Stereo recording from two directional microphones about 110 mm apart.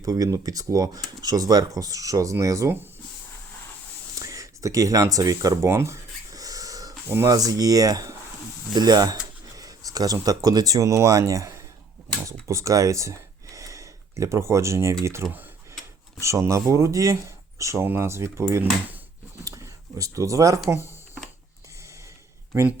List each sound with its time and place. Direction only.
0.0 s speech: 35° right (ahead or behind)
4.2 s speech: 30° right (ahead or behind)
19.5 s a sound: 30° right (ahead or behind)